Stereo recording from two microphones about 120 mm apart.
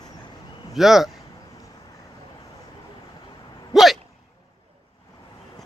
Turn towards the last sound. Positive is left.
turn(degrees=0)  # may be behind; listen again after turning